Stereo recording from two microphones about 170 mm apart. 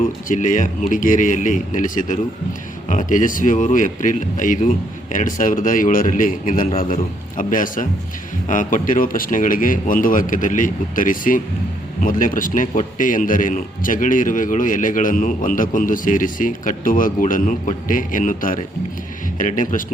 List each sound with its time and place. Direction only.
0.0 s a man's voice: 50° left (ahead or behind)